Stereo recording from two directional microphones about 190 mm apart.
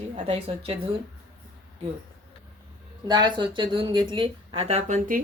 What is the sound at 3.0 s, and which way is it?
Speech, 25° right (ahead or behind).